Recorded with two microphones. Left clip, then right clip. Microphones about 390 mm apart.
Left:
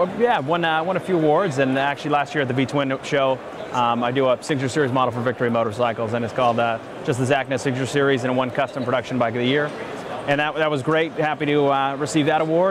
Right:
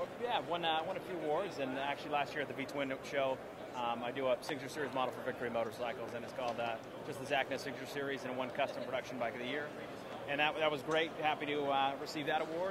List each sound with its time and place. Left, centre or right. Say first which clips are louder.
0.2 s a man's voice: left 14 dB; left